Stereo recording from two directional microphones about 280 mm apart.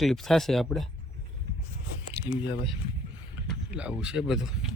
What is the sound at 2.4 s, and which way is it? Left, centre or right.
Speech, centre.